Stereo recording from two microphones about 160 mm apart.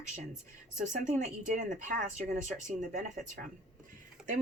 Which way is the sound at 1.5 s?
55° right (ahead or behind).